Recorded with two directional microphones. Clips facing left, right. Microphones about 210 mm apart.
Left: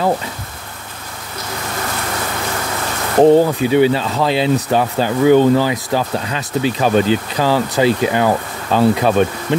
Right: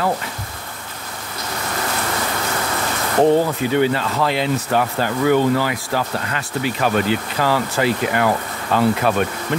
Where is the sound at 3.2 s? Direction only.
20° left (ahead or behind).